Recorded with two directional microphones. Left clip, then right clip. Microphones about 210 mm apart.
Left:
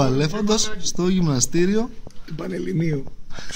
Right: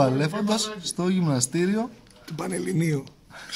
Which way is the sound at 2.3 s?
45° right (ahead or behind).